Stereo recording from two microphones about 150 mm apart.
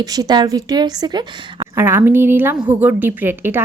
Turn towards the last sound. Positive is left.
turn(degrees=-15)  # may be behind; listen again after turning